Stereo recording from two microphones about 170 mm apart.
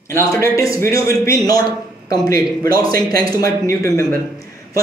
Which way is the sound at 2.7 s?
60° right (ahead or behind).